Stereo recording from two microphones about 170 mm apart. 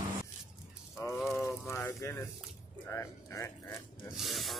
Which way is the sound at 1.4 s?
15° left (ahead or behind).